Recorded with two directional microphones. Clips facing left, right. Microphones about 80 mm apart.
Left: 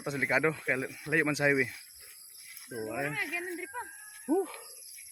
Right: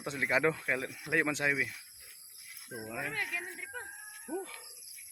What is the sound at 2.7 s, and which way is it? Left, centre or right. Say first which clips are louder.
Speech: left 4 dB; centre.